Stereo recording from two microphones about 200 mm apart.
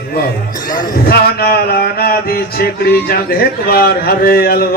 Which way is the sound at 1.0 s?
50° left (ahead or behind).